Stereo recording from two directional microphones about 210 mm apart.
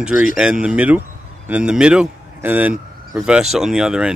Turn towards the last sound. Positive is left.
turn(degrees=-5)  # may be behind; listen again after turning